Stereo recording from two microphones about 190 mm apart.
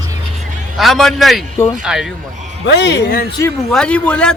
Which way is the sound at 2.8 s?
65° left (ahead or behind).